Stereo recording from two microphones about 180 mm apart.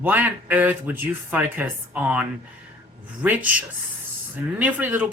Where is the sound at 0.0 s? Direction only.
10° right (ahead or behind).